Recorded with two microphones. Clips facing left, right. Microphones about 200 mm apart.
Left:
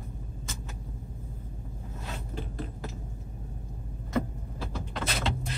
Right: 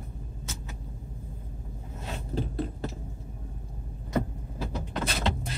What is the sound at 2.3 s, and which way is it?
Speech, 30° right (ahead or behind).